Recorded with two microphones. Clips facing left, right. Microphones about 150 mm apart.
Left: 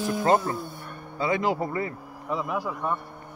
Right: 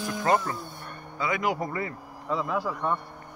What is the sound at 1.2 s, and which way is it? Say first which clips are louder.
Speech: left 3 dB; 30° left (ahead or behind).